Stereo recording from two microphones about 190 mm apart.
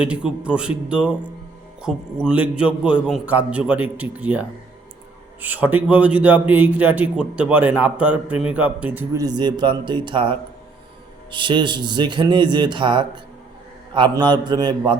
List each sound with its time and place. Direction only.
0.0 s a man's voice: 5° right (ahead or behind)
9.2 s speech: 20° right (ahead or behind)